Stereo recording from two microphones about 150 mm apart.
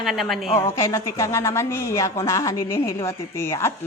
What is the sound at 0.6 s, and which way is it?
A woman's voice, 20° left (ahead or behind).